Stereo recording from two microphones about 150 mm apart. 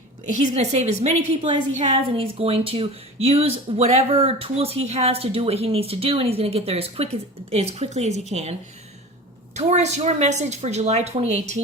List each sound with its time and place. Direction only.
0.3 s a woman's voice: 50° right (ahead or behind)
9.6 s a woman's voice: 50° right (ahead or behind)